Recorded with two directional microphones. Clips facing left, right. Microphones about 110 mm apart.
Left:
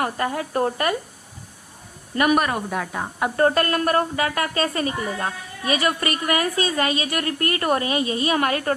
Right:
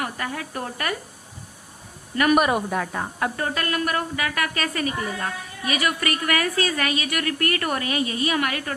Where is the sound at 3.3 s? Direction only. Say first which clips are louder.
Left 7 dB; 40° left (ahead or behind).